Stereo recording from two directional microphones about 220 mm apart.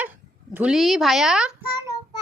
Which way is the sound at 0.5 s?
5° right (ahead or behind).